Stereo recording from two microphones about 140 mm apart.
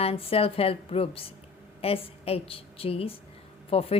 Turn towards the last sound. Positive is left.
turn(degrees=45)  # may be behind; listen again after turning